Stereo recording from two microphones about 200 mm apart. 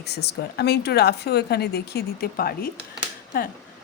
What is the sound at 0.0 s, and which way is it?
Speech, 55° left (ahead or behind).